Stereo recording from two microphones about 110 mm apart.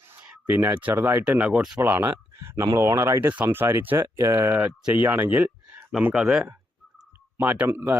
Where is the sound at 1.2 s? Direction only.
10° right (ahead or behind).